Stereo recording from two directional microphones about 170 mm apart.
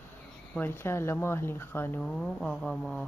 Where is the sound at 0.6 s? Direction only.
15° left (ahead or behind).